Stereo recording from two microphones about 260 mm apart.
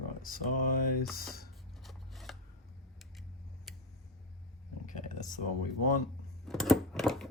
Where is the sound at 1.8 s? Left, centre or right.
Centre.